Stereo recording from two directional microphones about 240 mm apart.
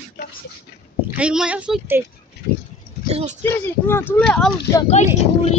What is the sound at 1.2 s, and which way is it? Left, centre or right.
Speech, centre.